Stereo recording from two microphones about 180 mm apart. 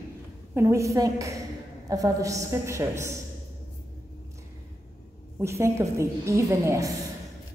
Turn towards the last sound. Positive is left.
turn(degrees=-15)  # may be behind; listen again after turning